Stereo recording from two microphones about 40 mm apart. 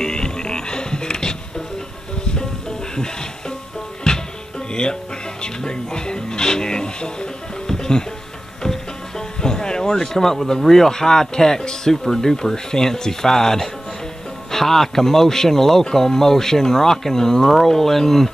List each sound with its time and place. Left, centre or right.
0.0 s music: centre
4.1 s music: centre
5.4 s speech: centre
9.4 s speech: centre